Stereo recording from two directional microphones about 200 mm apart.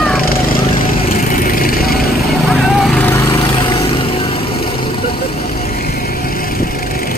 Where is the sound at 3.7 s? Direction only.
25° left (ahead or behind).